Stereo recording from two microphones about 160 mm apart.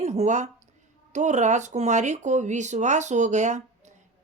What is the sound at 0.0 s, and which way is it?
A woman's voice, 45° right (ahead or behind).